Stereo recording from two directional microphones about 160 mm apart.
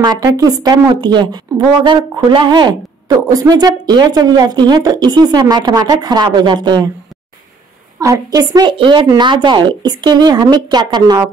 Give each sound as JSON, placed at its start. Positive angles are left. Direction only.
{"t": 0.0, "sound": "a woman's voice", "side_deg": -25}
{"t": 8.0, "sound": "a woman's voice", "side_deg": -20}